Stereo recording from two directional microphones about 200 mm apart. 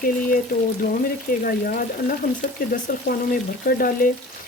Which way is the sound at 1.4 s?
45° left (ahead or behind).